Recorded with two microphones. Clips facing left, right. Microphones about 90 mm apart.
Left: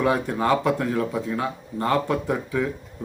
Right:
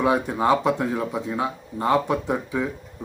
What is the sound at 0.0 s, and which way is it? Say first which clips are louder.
Speech: right 1 dB; 15° right (ahead or behind).